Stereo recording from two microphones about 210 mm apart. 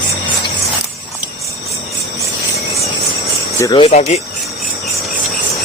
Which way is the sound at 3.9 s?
30° left (ahead or behind).